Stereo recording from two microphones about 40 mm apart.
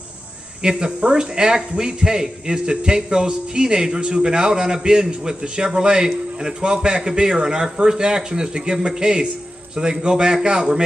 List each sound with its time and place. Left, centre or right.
0.6 s a man's voice: centre